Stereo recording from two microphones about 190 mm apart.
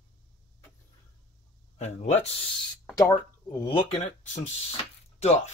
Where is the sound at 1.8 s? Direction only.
35° left (ahead or behind).